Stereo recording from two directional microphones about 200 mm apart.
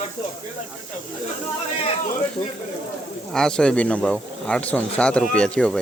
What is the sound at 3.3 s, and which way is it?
Speech, 5° left (ahead or behind).